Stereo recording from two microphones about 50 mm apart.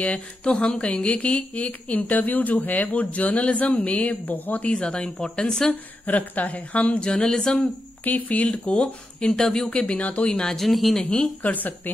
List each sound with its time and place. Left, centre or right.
0.0 s speech: left
5.7 s speech: left
7.1 s speech: centre
7.6 s speech: left
8.8 s speech: centre
10.6 s speech: centre
11.4 s a woman's voice: left